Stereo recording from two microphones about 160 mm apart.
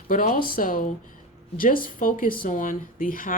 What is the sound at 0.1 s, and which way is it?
Speech, 60° left (ahead or behind).